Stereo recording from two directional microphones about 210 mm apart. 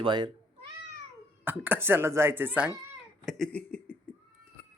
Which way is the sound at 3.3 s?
5° left (ahead or behind).